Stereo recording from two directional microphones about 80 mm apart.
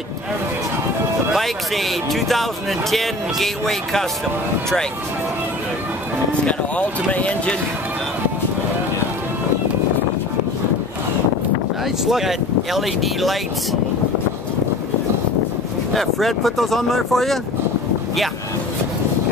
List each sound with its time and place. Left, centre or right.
1.3 s speech: centre
6.4 s speech: centre
12.1 s speech: centre
15.9 s speech: centre